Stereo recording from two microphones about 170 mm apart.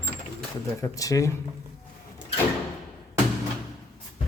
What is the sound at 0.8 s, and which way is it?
Speech, 20° left (ahead or behind).